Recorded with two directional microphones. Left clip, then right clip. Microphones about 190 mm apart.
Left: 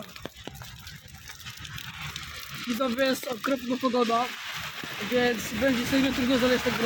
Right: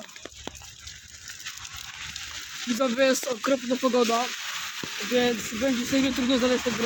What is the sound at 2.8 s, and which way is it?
Speech, 35° right (ahead or behind).